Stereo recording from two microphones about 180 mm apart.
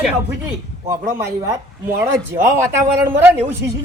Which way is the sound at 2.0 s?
15° right (ahead or behind).